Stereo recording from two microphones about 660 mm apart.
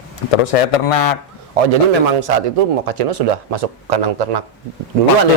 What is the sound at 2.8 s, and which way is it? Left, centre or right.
Speech, right.